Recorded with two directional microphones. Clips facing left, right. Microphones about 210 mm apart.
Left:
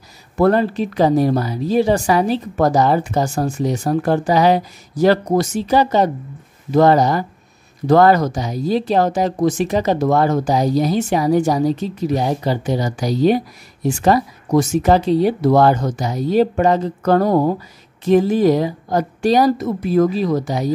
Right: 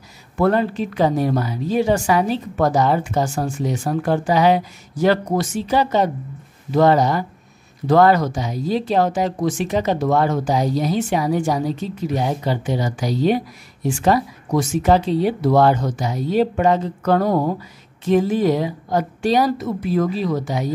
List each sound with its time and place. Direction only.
0.4 s a woman's voice: 40° left (ahead or behind)